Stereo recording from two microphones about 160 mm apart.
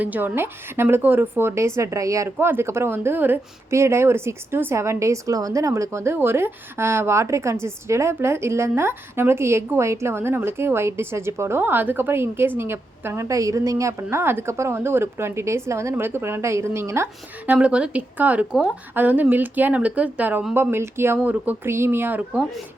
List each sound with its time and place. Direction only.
0.0 s a woman's voice: 10° right (ahead or behind)